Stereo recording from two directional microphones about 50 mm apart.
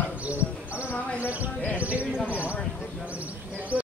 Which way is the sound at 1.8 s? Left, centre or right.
Right.